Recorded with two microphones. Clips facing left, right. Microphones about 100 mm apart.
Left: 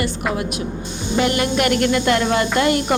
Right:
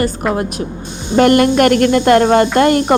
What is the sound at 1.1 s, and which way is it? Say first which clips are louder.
A woman's voice: right 9 dB; 55° right (ahead or behind).